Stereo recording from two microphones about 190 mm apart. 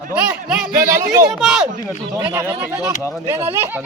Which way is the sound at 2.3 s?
15° right (ahead or behind).